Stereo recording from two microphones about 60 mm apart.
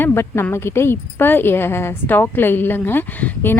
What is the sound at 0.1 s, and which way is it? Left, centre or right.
Speech, left.